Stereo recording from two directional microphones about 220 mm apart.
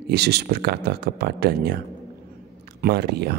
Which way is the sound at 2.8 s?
50° right (ahead or behind).